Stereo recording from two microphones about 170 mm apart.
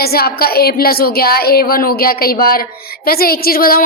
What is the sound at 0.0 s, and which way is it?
A woman's voice, 65° left (ahead or behind).